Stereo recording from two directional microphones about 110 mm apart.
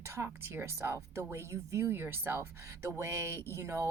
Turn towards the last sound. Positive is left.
turn(degrees=-25)  # may be behind; listen again after turning